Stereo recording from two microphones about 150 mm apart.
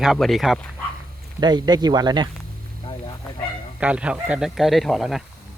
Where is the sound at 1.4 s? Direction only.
30° right (ahead or behind).